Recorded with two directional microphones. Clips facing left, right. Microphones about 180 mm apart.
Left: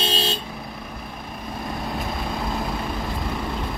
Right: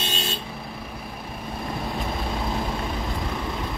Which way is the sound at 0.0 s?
30° left (ahead or behind).